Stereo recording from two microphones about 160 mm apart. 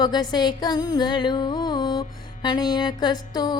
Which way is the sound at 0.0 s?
25° left (ahead or behind).